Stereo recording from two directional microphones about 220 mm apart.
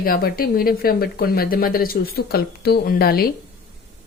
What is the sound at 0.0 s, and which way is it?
Speech, 45° left (ahead or behind).